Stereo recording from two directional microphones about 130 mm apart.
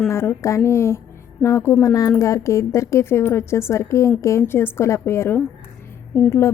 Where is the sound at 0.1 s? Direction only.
20° left (ahead or behind).